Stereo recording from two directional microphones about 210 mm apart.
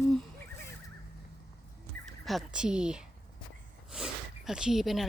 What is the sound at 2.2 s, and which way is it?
Speech, centre (ahead or behind).